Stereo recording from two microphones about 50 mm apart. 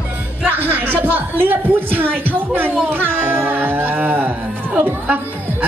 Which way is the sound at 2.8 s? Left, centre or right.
Right.